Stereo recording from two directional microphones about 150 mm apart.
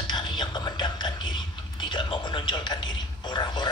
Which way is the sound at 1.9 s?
30° left (ahead or behind).